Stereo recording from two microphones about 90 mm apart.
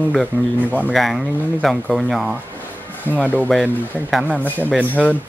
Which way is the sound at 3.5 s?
Centre (ahead or behind).